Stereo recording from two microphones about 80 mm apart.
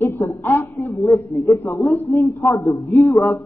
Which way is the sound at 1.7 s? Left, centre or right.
Left.